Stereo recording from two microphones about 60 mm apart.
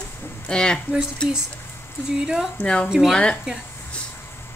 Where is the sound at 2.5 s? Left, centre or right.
Left.